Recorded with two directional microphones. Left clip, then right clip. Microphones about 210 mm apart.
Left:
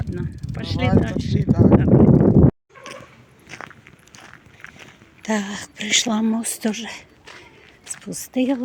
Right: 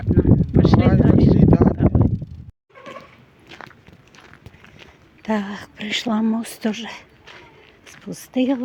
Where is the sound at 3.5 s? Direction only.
15° left (ahead or behind).